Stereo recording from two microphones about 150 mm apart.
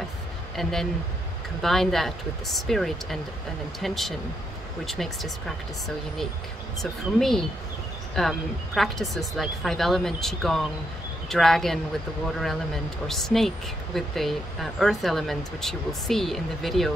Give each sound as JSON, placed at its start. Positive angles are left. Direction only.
{"t": 0.6, "sound": "speech", "side_deg": 0}
{"t": 6.8, "sound": "speech", "side_deg": 0}